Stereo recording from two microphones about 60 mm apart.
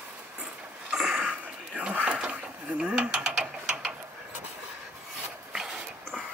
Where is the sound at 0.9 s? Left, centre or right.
Centre.